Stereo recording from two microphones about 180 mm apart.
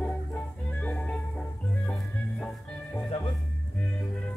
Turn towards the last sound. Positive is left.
turn(degrees=5)  # may be behind; listen again after turning